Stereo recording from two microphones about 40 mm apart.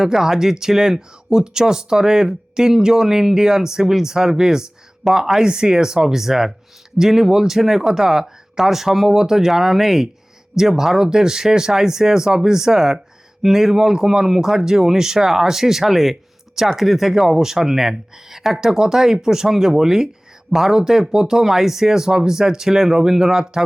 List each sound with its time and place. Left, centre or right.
0.0 s speech: centre